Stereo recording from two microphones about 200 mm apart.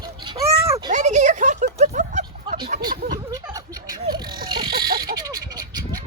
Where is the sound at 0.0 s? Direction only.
20° right (ahead or behind).